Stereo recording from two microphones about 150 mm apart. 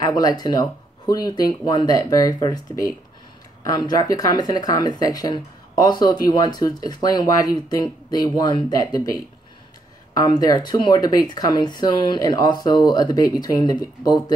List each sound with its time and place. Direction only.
0.0 s speech: 25° left (ahead or behind)